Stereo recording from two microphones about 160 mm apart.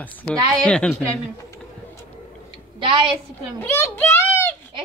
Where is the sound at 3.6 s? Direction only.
15° left (ahead or behind).